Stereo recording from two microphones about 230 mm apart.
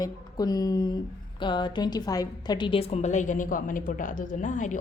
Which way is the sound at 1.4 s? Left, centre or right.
Centre.